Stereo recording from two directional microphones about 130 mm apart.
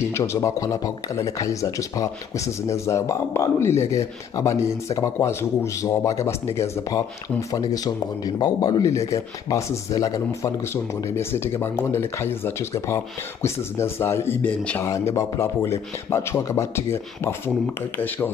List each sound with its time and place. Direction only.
0.1 s speech: 20° left (ahead or behind)
14.9 s speech: 25° left (ahead or behind)